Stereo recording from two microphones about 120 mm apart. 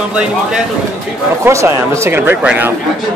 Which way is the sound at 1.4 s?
25° right (ahead or behind).